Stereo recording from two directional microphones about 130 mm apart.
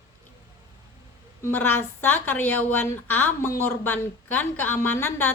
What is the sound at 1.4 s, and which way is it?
A woman's voice, 15° left (ahead or behind).